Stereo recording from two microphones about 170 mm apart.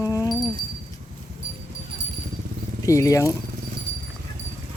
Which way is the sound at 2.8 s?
20° left (ahead or behind).